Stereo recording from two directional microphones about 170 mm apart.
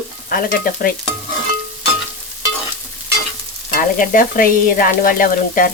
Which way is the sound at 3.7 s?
55° left (ahead or behind).